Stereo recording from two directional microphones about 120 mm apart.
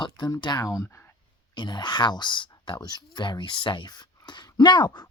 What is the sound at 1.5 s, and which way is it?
Speech, 40° left (ahead or behind).